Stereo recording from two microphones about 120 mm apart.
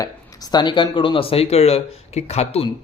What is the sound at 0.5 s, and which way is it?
Speech, 40° left (ahead or behind).